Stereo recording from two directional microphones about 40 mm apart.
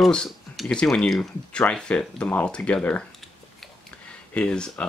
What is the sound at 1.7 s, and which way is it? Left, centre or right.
Speech, left.